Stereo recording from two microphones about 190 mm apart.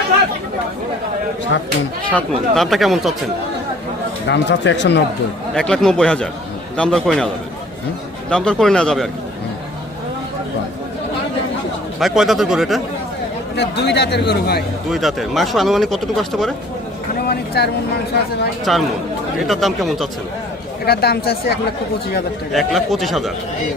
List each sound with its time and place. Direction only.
2.0 s speech: 5° left (ahead or behind)
4.3 s speech: 65° left (ahead or behind)
5.5 s speech: 5° left (ahead or behind)
8.3 s speech: 5° left (ahead or behind)
11.9 s speech: centre (ahead or behind)
13.6 s speech: 60° left (ahead or behind)
14.8 s speech: centre (ahead or behind)
17.2 s speech: 55° left (ahead or behind)
18.6 s speech: centre (ahead or behind)
20.8 s speech: 55° left (ahead or behind)
22.5 s speech: centre (ahead or behind)